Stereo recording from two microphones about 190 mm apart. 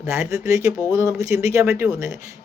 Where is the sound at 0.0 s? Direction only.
15° right (ahead or behind).